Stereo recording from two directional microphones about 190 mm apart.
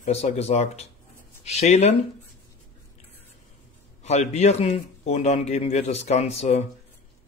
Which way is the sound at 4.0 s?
35° left (ahead or behind).